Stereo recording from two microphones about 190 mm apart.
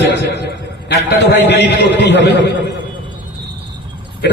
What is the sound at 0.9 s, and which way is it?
A man's voice, 60° left (ahead or behind).